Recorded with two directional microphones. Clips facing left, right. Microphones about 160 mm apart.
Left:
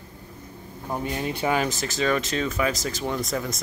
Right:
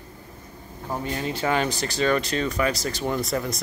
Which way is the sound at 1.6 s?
Centre (ahead or behind).